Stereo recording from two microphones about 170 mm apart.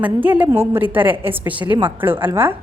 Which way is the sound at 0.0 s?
10° right (ahead or behind).